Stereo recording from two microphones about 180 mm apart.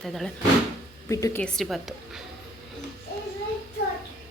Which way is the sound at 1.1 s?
15° left (ahead or behind).